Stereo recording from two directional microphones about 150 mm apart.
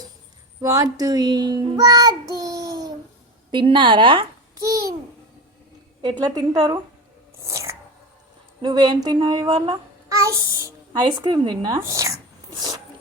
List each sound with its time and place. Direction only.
0.6 s child singing: 20° right (ahead or behind)
3.5 s speech: 35° right (ahead or behind)
4.6 s child singing: 25° right (ahead or behind)
6.0 s child singing: 30° right (ahead or behind)
7.4 s a sound: 20° right (ahead or behind)
8.6 s child singing: 30° right (ahead or behind)
10.1 s a child's voice: 20° right (ahead or behind)
11.8 s a sound: 20° right (ahead or behind)